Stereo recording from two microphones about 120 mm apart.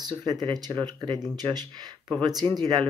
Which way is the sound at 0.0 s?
35° right (ahead or behind).